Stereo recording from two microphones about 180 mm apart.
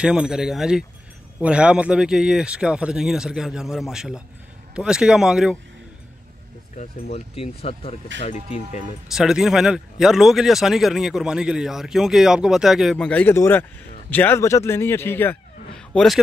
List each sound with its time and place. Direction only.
0.0 s speech: 5° right (ahead or behind)
7.1 s speech: 35° left (ahead or behind)
9.1 s a man's voice: centre (ahead or behind)